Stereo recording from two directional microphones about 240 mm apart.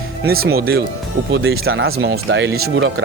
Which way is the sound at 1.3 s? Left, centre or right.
Right.